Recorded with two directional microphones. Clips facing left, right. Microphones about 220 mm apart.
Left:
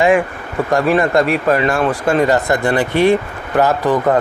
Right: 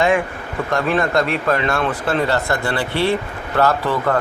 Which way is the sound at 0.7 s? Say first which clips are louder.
Left 5 dB; 15° left (ahead or behind).